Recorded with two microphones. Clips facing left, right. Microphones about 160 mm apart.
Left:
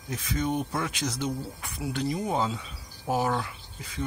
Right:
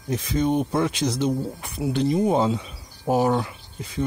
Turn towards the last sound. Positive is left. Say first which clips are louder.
# right 6 dB
turn(degrees=-25)  # may be behind; listen again after turning